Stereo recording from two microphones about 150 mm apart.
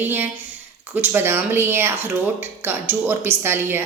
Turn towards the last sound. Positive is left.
turn(degrees=-15)  # may be behind; listen again after turning